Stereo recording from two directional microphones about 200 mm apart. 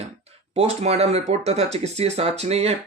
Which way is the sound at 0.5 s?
30° right (ahead or behind).